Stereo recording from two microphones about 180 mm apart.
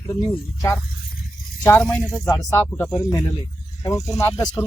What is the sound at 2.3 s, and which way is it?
Speech, 20° left (ahead or behind).